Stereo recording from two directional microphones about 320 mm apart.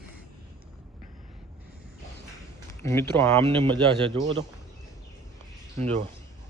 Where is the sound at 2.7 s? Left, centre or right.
Centre.